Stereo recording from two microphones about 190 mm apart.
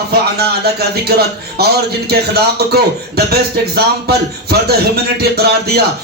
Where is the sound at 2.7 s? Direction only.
55° right (ahead or behind).